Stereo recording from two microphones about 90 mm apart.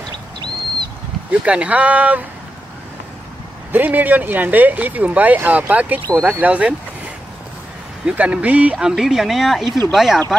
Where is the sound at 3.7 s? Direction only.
20° right (ahead or behind).